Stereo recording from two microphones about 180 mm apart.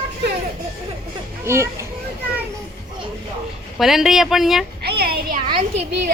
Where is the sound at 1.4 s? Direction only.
15° right (ahead or behind).